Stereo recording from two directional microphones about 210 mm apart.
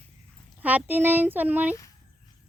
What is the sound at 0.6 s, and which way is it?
Speech, 10° right (ahead or behind).